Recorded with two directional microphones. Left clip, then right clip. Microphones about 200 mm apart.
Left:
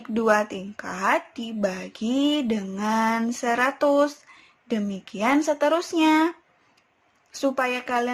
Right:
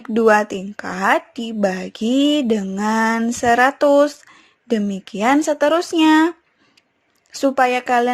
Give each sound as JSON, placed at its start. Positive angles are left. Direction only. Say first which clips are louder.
{"t": 0.0, "sound": "speech", "louder": "right 7 dB", "side_deg": -30}